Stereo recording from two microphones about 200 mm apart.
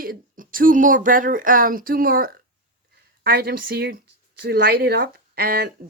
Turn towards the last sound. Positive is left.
turn(degrees=-50)  # may be behind; listen again after turning